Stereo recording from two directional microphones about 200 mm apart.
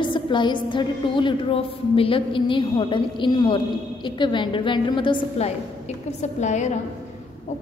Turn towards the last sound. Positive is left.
turn(degrees=35)  # may be behind; listen again after turning